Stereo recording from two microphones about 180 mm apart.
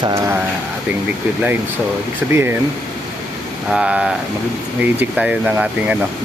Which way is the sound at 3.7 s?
5° right (ahead or behind).